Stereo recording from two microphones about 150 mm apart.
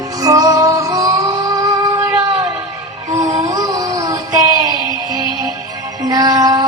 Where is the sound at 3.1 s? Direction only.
25° right (ahead or behind).